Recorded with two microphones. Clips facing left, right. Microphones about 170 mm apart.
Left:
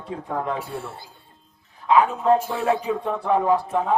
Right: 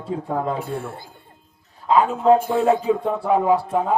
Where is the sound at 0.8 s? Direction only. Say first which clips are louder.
Right 3 dB; 50° right (ahead or behind).